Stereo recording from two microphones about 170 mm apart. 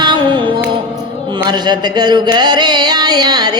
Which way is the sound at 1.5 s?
25° right (ahead or behind).